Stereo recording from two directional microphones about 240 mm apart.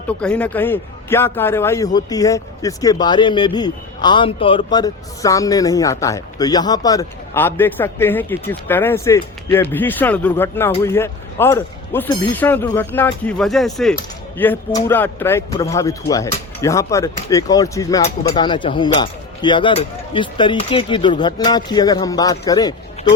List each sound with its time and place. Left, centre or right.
0.2 s a man's voice: centre